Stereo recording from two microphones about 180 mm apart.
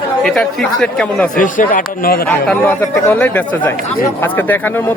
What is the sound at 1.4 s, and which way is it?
Speech, 50° left (ahead or behind).